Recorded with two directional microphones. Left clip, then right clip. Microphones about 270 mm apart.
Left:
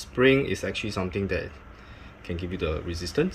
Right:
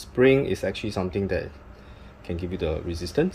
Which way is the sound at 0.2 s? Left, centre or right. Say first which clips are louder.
Right 2 dB; centre.